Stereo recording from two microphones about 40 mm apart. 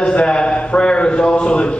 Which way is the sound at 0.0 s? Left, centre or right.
Left.